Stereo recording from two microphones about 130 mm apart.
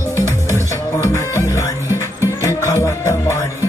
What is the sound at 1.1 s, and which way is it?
Music, 25° left (ahead or behind).